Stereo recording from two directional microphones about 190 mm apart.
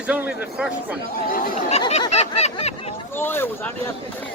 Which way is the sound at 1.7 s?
35° left (ahead or behind).